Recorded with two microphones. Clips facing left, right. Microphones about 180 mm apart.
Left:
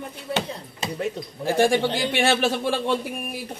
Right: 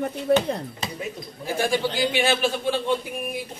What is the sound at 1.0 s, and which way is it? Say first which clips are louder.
A man's voice: left 5 dB; 75° left (ahead or behind).